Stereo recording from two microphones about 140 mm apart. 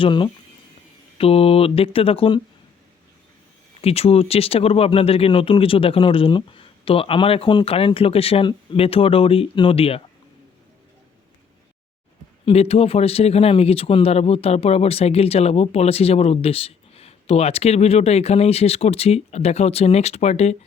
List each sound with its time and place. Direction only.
0.0 s speech: 35° left (ahead or behind)
3.8 s speech: 45° left (ahead or behind)
12.5 s speech: 45° left (ahead or behind)